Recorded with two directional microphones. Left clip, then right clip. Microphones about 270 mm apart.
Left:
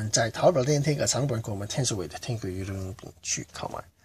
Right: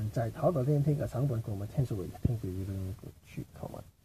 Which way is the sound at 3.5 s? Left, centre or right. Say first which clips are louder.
Left 10 dB; centre.